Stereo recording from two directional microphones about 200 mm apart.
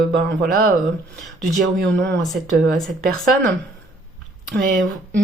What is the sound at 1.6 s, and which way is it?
Speech, 60° right (ahead or behind).